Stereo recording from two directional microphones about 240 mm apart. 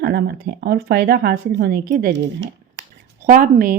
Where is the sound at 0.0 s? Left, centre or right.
Right.